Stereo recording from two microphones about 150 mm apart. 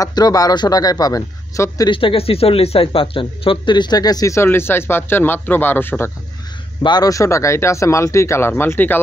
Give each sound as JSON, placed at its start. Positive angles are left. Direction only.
{"t": 0.0, "sound": "speech", "side_deg": 25}
{"t": 2.0, "sound": "speech", "side_deg": 40}
{"t": 6.8, "sound": "speech", "side_deg": 25}